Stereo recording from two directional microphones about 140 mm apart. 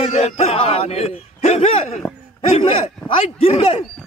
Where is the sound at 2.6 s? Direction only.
40° left (ahead or behind).